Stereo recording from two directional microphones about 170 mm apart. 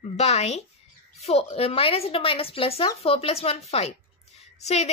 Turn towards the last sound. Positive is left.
turn(degrees=40)  # may be behind; listen again after turning